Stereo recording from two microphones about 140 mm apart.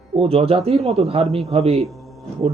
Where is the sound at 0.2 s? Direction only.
45° right (ahead or behind).